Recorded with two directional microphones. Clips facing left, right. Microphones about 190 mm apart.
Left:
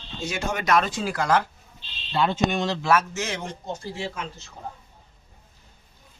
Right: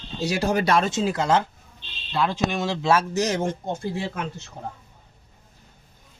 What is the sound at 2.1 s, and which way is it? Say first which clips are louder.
Speech: left 1 dB; centre (ahead or behind).